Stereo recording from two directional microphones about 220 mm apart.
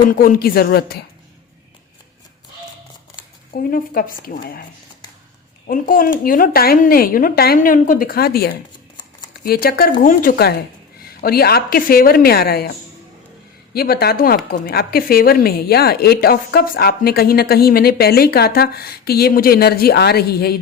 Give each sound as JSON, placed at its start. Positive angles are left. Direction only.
{"t": 0.0, "sound": "a woman's voice", "side_deg": 40}
{"t": 3.5, "sound": "speech", "side_deg": 40}
{"t": 5.6, "sound": "a woman's voice", "side_deg": 40}
{"t": 13.7, "sound": "a woman's voice", "side_deg": 45}